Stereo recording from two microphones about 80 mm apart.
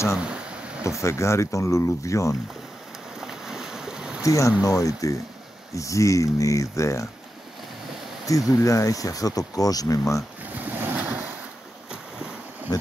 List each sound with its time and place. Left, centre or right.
0.2 s a sound: centre
0.8 s speech: left
3.2 s boat: centre
4.2 s speech: left
8.3 s speech: left
10.6 s waves: right
11.9 s boat: centre